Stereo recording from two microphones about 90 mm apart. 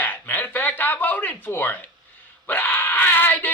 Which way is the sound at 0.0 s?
20° left (ahead or behind).